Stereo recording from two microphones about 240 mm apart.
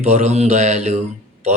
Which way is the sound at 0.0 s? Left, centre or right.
Right.